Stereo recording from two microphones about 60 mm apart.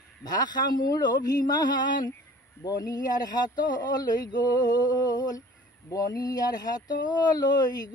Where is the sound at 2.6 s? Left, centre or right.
Left.